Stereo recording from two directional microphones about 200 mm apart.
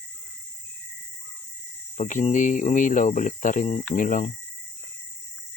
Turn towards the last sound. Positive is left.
turn(degrees=40)  # may be behind; listen again after turning